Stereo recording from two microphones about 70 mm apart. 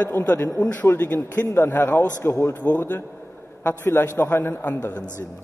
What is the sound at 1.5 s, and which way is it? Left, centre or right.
A man's voice, left.